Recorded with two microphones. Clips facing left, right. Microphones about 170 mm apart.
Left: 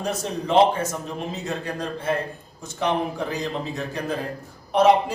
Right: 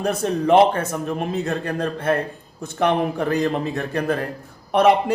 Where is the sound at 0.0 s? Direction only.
55° right (ahead or behind).